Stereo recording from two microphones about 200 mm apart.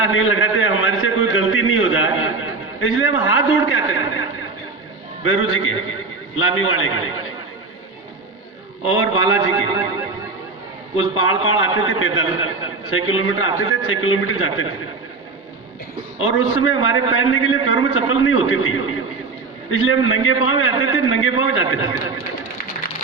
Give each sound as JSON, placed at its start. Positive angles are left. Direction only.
{"t": 0.0, "sound": "a sound", "side_deg": 90}
{"t": 5.2, "sound": "a man's voice", "side_deg": 90}
{"t": 8.8, "sound": "a man's voice", "side_deg": 90}
{"t": 10.9, "sound": "a man's voice", "side_deg": 90}
{"t": 16.1, "sound": "a man's voice", "side_deg": 90}